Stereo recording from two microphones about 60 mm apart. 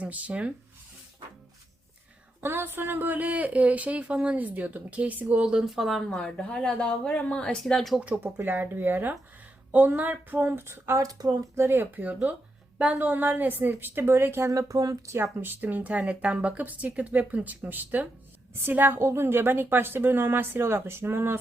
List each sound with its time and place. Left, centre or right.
0.0 s speech: right
2.4 s speech: right
5.5 s speech: centre
7.6 s speech: centre
8.0 s speech: right
10.5 s speech: right
10.9 s speech: right
11.5 s speech: right
11.9 s speech: right
14.7 s speech: right
15.2 s speech: right
19.0 s speech: right